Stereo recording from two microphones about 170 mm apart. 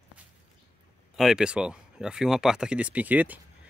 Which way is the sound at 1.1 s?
5° right (ahead or behind).